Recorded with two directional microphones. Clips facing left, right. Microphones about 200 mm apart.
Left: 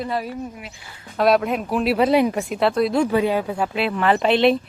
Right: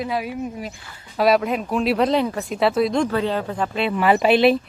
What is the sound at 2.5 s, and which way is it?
Speech, centre (ahead or behind).